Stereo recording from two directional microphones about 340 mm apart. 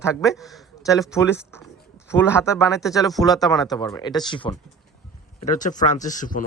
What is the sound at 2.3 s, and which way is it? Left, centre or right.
Speech, centre.